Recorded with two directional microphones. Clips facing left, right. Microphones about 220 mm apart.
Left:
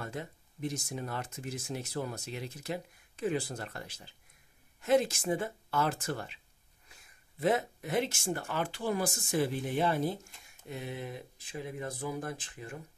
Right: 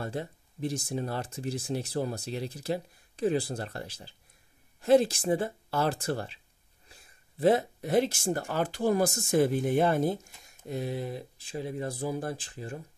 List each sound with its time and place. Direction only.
0.0 s speech: 35° right (ahead or behind); by 10.1 s 50° right (ahead or behind)
10.7 s speech: 35° right (ahead or behind)